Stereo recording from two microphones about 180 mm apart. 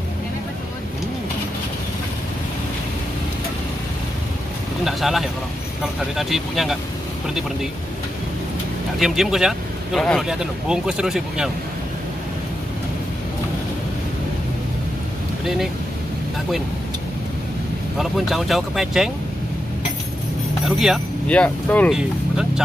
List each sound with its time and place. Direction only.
4.8 s speech: centre (ahead or behind)
9.0 s speech: centre (ahead or behind)
15.4 s speech: centre (ahead or behind)
17.9 s speech: centre (ahead or behind)
20.6 s speech: centre (ahead or behind)